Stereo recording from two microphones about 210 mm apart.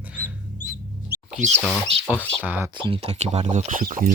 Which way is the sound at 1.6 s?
Centre (ahead or behind).